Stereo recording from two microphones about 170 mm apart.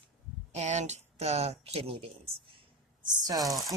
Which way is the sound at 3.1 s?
20° right (ahead or behind).